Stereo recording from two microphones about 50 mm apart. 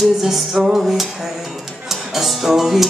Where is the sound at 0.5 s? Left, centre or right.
Centre.